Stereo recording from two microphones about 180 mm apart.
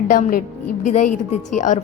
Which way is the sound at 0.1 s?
50° left (ahead or behind).